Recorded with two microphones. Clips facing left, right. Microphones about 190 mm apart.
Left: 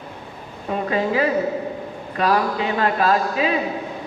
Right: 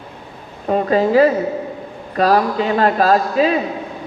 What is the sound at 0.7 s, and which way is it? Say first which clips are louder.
A man's voice: right 7 dB; 40° right (ahead or behind).